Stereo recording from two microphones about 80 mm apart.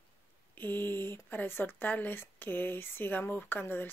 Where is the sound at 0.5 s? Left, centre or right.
Left.